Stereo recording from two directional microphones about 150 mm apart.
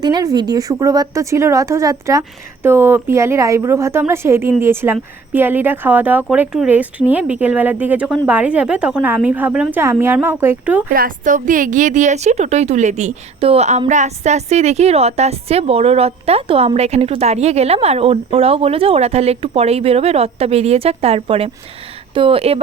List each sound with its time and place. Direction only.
0.0 s a woman's voice: 25° right (ahead or behind)
10.8 s speech: 65° right (ahead or behind); by 22.6 s 40° right (ahead or behind)